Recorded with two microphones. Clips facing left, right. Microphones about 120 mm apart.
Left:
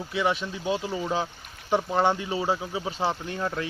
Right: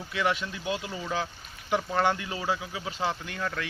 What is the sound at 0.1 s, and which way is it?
Speech, 20° left (ahead or behind).